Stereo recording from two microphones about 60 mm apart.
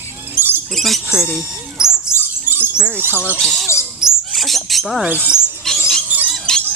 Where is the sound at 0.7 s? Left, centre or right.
Centre.